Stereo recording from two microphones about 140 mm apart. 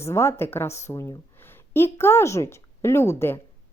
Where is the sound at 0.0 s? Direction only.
20° left (ahead or behind).